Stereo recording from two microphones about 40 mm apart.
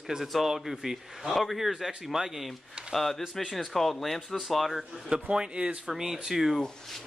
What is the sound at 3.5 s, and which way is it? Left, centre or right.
Speech, centre.